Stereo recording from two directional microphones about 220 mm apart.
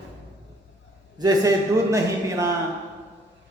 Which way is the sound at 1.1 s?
15° right (ahead or behind).